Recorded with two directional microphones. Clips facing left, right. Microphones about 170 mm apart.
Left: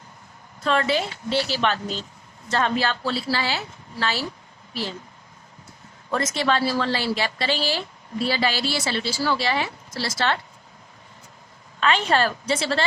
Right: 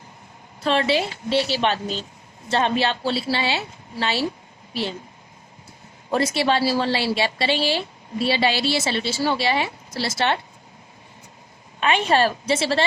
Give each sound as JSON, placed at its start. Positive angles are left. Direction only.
{"t": 0.6, "sound": "a woman's voice", "side_deg": -25}
{"t": 6.1, "sound": "a woman's voice", "side_deg": -30}
{"t": 11.8, "sound": "a woman's voice", "side_deg": -20}